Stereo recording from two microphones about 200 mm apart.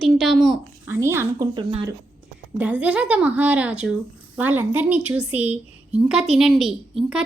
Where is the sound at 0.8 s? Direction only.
10° right (ahead or behind).